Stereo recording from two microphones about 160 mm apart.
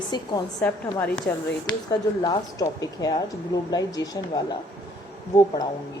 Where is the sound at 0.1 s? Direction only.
25° left (ahead or behind).